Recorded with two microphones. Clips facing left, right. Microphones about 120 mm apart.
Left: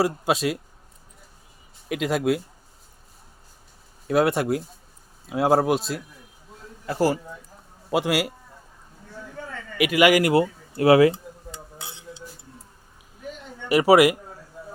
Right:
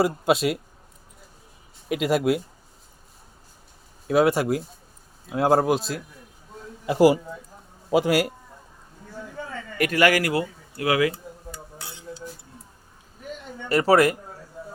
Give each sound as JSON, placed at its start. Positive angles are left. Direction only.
{"t": 0.0, "sound": "speech", "side_deg": 0}
{"t": 1.9, "sound": "speech", "side_deg": 0}
{"t": 4.0, "sound": "speech", "side_deg": 0}
{"t": 6.8, "sound": "a man's voice", "side_deg": -15}
{"t": 7.9, "sound": "a man's voice", "side_deg": 0}
{"t": 9.7, "sound": "a sound", "side_deg": 10}
{"t": 13.7, "sound": "speech", "side_deg": 10}